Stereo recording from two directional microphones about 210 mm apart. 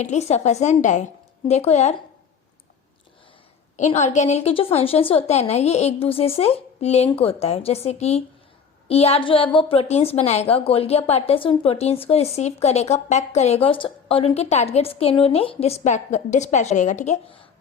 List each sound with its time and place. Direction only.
0.0 s a woman's voice: 35° left (ahead or behind)
3.8 s a woman's voice: 35° left (ahead or behind)